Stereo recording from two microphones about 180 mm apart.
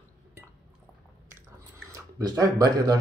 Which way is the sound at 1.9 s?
20° right (ahead or behind).